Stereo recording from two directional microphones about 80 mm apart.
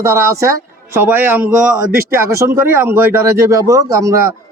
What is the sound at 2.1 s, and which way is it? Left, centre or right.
A man's voice, right.